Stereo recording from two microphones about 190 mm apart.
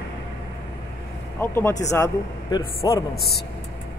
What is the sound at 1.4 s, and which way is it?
Speech, 10° left (ahead or behind).